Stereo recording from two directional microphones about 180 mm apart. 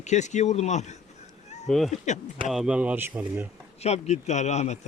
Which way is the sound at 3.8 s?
35° left (ahead or behind).